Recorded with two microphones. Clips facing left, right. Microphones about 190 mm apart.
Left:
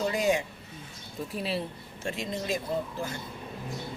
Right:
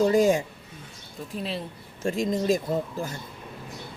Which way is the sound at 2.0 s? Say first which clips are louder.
Right 8 dB; 45° right (ahead or behind).